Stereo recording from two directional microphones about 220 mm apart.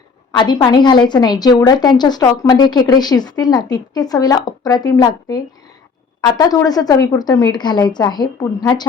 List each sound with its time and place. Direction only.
0.3 s a woman's voice: 20° left (ahead or behind)